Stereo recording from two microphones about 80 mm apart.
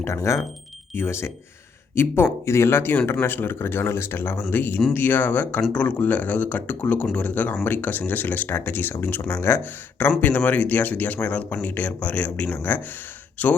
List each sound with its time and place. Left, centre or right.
0.0 s speech: left